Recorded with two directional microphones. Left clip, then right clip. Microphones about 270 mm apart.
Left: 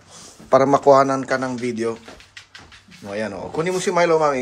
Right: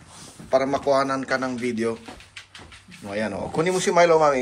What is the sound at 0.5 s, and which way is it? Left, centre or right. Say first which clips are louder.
A man's voice: left 7 dB; left.